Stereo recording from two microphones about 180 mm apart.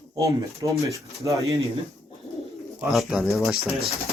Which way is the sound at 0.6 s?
25° right (ahead or behind).